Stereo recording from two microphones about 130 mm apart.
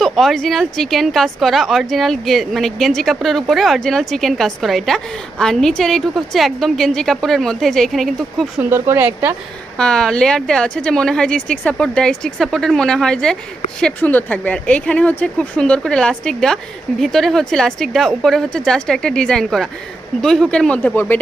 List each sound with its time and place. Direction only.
0.0 s a woman's voice: centre (ahead or behind)
8.7 s a woman's voice: 15° right (ahead or behind)
9.7 s a woman's voice: 5° left (ahead or behind)